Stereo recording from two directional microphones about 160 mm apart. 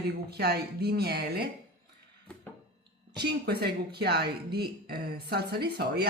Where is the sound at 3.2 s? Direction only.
90° right.